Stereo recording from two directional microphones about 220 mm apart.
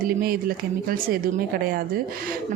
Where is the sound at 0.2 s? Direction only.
40° right (ahead or behind).